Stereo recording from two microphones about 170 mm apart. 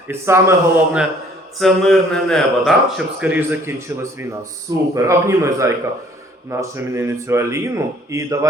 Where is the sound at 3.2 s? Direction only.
10° right (ahead or behind).